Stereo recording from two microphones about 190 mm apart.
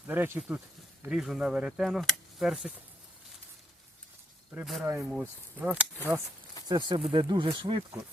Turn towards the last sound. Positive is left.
turn(degrees=-25)  # may be behind; listen again after turning